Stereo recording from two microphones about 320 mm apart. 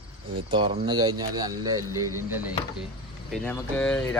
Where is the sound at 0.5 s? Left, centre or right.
Centre.